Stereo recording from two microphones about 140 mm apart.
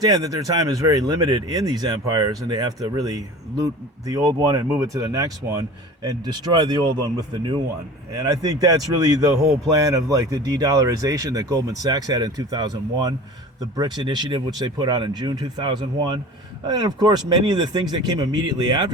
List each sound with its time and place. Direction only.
0.0 s speech: 25° right (ahead or behind)